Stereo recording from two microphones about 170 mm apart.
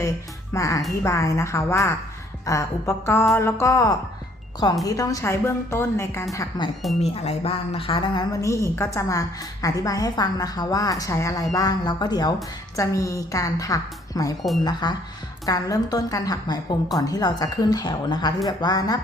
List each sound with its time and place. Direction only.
0.5 s a woman's voice: 20° left (ahead or behind)
7.0 s a woman's voice: 35° left (ahead or behind)